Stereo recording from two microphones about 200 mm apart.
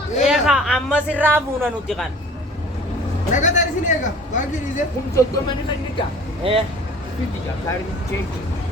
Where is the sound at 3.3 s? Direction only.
40° left (ahead or behind).